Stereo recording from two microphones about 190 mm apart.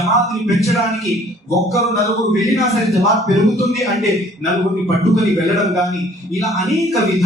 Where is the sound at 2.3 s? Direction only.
Centre (ahead or behind).